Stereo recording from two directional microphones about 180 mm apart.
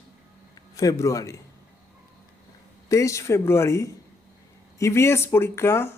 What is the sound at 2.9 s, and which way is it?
Speech, 15° left (ahead or behind).